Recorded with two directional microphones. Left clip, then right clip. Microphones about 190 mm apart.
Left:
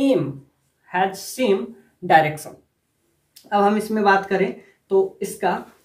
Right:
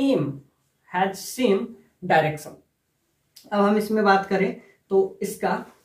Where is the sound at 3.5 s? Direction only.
30° left (ahead or behind).